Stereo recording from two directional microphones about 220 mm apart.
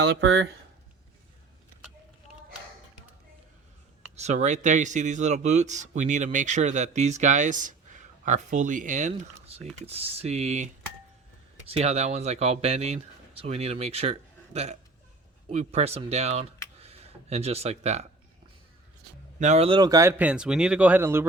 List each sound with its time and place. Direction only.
0.0 s speech: 50° right (ahead or behind)
4.1 s speech: 30° right (ahead or behind)
19.4 s a man's voice: 30° right (ahead or behind); by 21.2 s 10° right (ahead or behind)